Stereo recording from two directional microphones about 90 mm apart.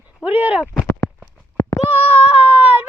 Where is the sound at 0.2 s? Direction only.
20° right (ahead or behind).